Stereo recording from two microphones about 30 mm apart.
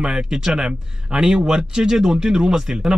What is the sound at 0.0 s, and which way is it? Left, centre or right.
Speech, right.